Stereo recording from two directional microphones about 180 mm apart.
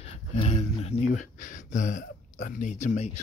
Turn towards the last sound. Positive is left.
turn(degrees=40)  # may be behind; listen again after turning